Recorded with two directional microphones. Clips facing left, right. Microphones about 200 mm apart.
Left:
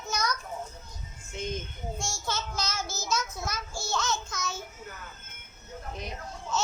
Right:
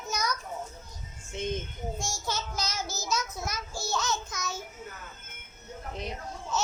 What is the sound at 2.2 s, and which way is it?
Child singing, 15° right (ahead or behind).